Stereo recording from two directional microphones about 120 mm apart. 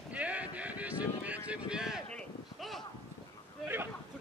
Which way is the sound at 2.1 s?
5° left (ahead or behind).